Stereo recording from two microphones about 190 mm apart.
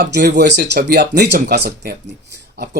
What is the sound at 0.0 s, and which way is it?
Speech, 60° right (ahead or behind).